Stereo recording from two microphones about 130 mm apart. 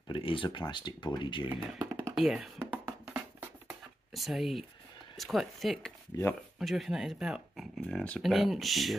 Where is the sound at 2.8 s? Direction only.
15° right (ahead or behind).